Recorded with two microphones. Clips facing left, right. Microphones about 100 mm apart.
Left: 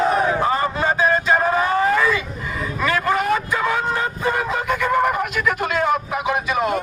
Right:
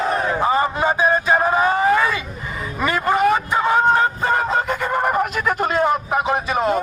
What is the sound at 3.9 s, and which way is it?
Vehicle, 40° right (ahead or behind).